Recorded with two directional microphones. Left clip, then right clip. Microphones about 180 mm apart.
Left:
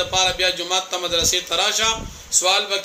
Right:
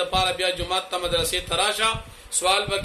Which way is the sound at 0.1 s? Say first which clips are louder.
Left 3 dB; 5° right (ahead or behind).